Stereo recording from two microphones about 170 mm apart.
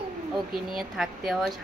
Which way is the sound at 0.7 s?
Centre (ahead or behind).